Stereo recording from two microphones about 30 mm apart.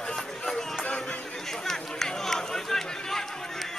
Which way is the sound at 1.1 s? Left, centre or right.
Left.